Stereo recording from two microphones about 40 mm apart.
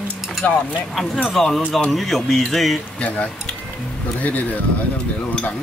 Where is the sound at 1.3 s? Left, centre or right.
Centre.